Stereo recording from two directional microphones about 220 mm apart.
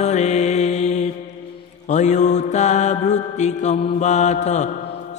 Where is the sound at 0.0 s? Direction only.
30° left (ahead or behind).